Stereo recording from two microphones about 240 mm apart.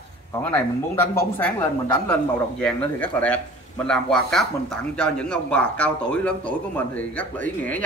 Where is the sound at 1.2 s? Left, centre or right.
Centre.